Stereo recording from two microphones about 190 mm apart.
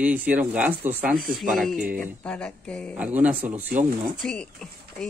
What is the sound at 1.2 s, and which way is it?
Speech, 45° right (ahead or behind).